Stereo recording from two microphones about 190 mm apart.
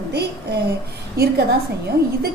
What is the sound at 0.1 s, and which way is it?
Speech, 60° right (ahead or behind).